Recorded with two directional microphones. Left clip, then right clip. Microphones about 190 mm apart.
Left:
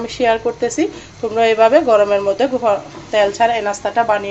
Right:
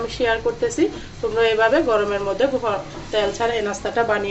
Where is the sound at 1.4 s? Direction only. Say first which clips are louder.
Left 6 dB; 45° left (ahead or behind).